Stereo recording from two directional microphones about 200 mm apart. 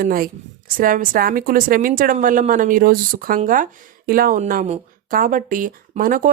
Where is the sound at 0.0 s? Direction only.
45° right (ahead or behind).